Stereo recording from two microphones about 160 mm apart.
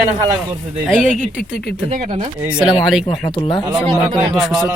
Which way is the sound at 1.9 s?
45° right (ahead or behind).